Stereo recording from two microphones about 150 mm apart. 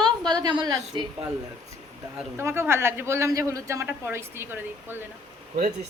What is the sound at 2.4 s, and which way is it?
A man's voice, 15° right (ahead or behind).